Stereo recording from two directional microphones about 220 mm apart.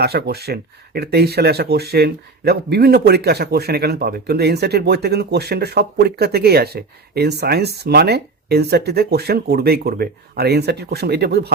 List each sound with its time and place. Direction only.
0.0 s speech: 45° right (ahead or behind)